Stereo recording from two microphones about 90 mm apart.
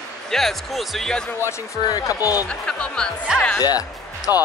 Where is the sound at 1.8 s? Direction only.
45° left (ahead or behind).